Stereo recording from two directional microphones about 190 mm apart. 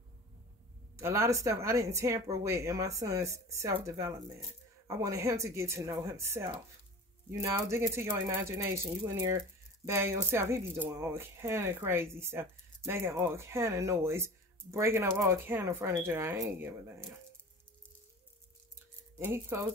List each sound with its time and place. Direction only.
0.9 s speech: 15° right (ahead or behind)
19.1 s speech: 15° right (ahead or behind)